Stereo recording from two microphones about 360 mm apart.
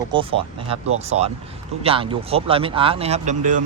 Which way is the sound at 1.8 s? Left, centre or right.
Centre.